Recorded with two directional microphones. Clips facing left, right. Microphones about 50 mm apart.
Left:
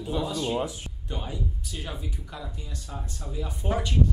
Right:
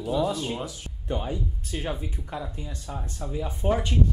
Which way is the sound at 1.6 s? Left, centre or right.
Right.